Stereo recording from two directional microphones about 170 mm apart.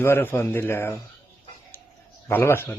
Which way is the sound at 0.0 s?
15° left (ahead or behind).